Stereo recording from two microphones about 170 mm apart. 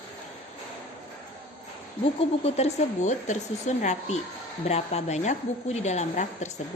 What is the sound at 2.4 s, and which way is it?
A woman's voice, 40° left (ahead or behind).